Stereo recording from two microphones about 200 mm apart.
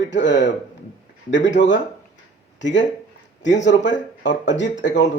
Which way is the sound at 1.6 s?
65° left (ahead or behind).